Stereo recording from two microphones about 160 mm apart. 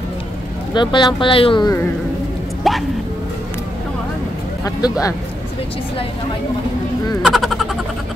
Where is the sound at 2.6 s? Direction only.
Centre (ahead or behind).